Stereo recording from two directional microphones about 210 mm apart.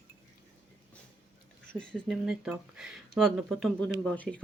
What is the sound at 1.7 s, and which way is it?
Speech, 5° left (ahead or behind).